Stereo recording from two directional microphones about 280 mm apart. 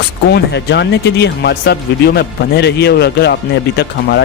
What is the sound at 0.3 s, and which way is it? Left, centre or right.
Speech, left.